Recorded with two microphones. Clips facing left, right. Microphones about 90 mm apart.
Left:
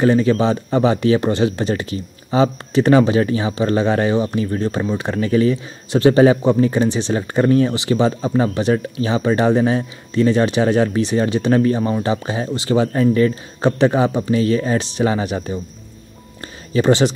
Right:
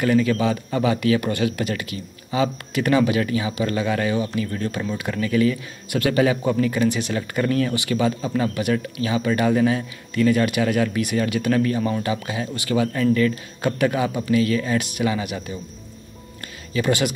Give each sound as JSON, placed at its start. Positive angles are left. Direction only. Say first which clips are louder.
{"t": 0.0, "sound": "speech", "louder": "left 4 dB", "side_deg": 30}
{"t": 16.7, "sound": "speech", "louder": "left 7 dB", "side_deg": 30}